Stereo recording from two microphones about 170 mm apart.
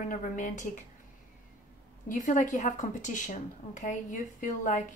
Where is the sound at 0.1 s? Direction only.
50° left (ahead or behind).